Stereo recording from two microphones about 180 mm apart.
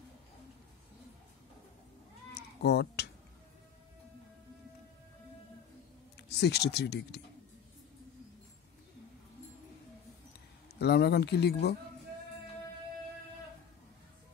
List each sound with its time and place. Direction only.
2.3 s sheep: 65° left (ahead or behind)
6.2 s speech: 65° left (ahead or behind)
10.8 s speech: 65° left (ahead or behind)